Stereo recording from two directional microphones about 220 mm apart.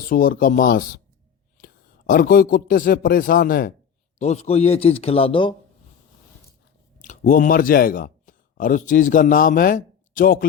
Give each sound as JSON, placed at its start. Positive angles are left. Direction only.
{"t": 0.1, "sound": "a man's voice", "side_deg": 40}
{"t": 4.2, "sound": "a man's voice", "side_deg": 30}
{"t": 7.0, "sound": "speech", "side_deg": 40}